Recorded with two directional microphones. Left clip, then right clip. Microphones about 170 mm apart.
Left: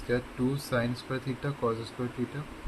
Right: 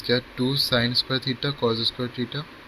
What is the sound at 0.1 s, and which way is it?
Speech, 45° right (ahead or behind).